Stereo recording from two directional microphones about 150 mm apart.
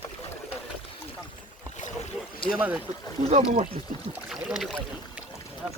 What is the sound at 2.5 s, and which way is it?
Speech, 10° right (ahead or behind).